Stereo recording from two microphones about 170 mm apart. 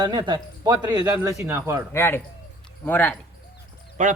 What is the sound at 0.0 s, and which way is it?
Speech, 25° right (ahead or behind).